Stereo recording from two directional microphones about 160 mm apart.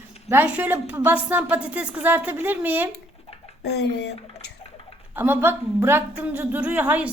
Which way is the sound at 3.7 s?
90° left.